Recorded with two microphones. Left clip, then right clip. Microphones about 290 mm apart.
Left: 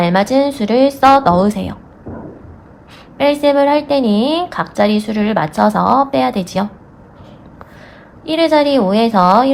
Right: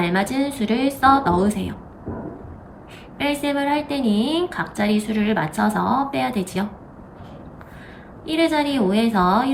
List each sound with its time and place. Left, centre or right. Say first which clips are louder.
0.0 s a woman's voice: left 9 dB; left
3.2 s a woman's voice: left 11 dB; left
8.2 s a woman's voice: left 8 dB; centre